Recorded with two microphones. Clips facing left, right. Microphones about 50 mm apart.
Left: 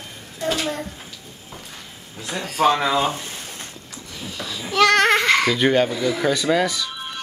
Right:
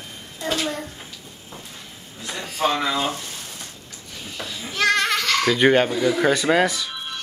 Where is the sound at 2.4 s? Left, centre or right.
Left.